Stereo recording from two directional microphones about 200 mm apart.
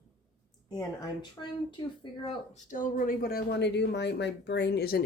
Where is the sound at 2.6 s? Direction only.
40° left (ahead or behind).